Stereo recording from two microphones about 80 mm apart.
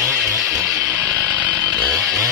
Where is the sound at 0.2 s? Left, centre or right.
Centre.